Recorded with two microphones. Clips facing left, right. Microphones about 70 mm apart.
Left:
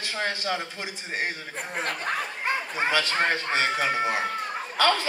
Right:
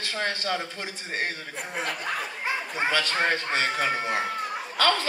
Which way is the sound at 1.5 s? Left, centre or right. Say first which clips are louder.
Left 1 dB; left.